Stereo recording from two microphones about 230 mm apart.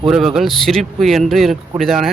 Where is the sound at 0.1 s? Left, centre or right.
Centre.